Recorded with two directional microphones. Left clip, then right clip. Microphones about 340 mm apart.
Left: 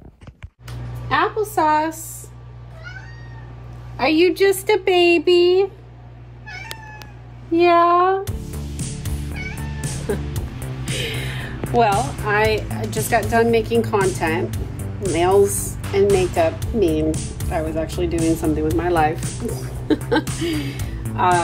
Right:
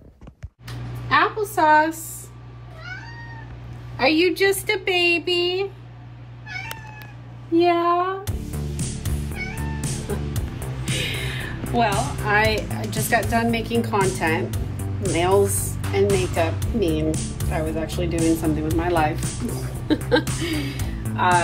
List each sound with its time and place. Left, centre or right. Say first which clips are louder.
1.0 s a woman's voice: even; centre
3.9 s a woman's voice: left 2 dB; centre; by 5.7 s left
7.5 s speech: left 4 dB; left
8.2 s music: left 4 dB; centre
11.9 s a woman's voice: left 2 dB; centre
15.5 s music: left 1 dB; centre
15.9 s speech: left 4 dB; centre